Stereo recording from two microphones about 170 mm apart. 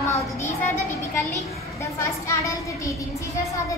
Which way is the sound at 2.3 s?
20° left (ahead or behind).